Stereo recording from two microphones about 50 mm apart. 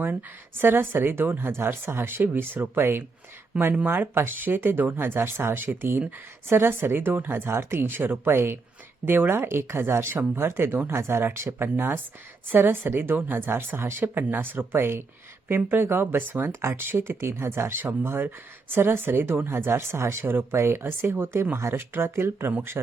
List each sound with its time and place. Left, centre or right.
0.0 s a woman's voice: right
7.9 s a woman's voice: right
9.0 s a woman's voice: right
9.3 s a woman's voice: right
13.7 s speech: right
14.2 s a woman's voice: right
16.5 s a woman's voice: right